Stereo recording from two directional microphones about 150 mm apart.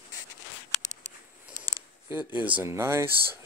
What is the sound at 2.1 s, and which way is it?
Speech, 10° right (ahead or behind).